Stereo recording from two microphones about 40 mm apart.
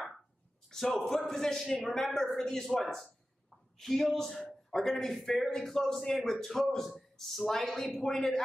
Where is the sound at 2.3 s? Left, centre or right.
Centre.